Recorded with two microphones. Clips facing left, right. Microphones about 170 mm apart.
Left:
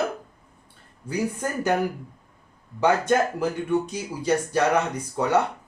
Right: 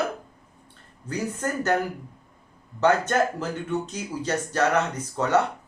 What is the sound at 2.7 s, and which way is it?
Speech, 10° left (ahead or behind).